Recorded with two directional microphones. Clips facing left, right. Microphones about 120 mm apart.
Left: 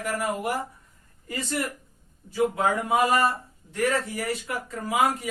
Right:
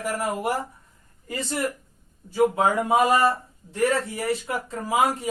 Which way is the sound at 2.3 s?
25° right (ahead or behind).